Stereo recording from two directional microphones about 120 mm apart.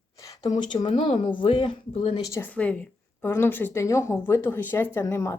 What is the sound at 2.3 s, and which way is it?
A woman's voice, 15° left (ahead or behind).